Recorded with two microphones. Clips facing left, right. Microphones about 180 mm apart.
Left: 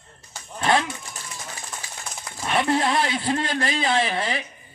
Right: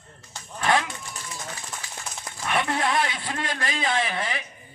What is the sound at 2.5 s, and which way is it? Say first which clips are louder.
A man's voice: left 3 dB; 30° left (ahead or behind).